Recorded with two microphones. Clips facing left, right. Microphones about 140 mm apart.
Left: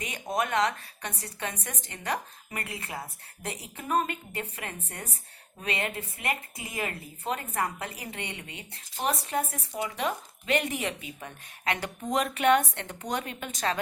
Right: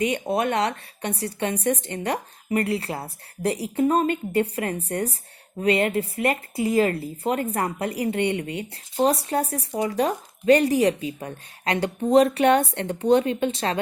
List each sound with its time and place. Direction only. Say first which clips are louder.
0.0 s a woman's voice: right 8 dB; 30° right (ahead or behind)